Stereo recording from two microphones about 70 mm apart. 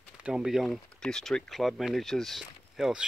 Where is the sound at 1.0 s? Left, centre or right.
Centre.